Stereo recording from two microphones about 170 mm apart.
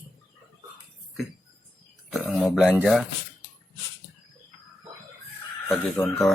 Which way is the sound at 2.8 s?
Centre (ahead or behind).